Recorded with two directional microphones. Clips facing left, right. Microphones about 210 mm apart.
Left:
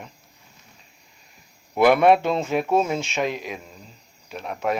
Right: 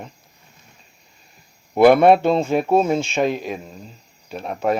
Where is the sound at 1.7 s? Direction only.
30° right (ahead or behind).